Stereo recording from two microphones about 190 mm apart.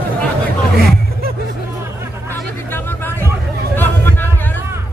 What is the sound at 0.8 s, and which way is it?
Hubbub, 55° right (ahead or behind).